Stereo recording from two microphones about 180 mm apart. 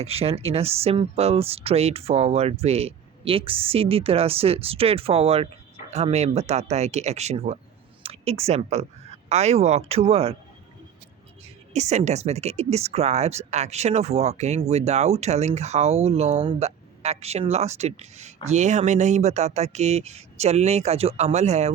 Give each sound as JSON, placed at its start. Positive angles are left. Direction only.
{"t": 0.0, "sound": "speech", "side_deg": -35}
{"t": 11.7, "sound": "speech", "side_deg": -40}